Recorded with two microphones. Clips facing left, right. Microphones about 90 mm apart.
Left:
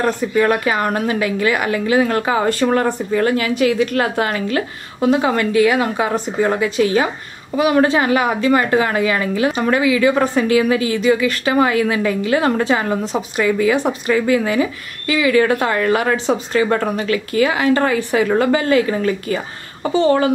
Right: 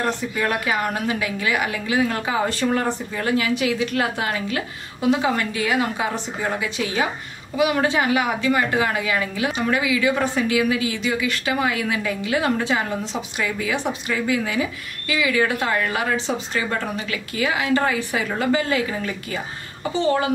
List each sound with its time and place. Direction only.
0.0 s a woman's voice: 50° left (ahead or behind)